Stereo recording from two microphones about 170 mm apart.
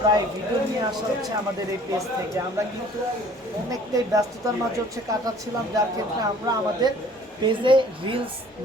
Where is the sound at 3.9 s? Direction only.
20° right (ahead or behind).